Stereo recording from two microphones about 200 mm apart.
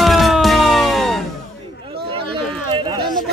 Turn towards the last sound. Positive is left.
turn(degrees=-25)  # may be behind; listen again after turning